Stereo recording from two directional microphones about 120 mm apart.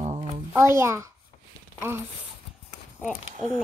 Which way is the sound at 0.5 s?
20° right (ahead or behind).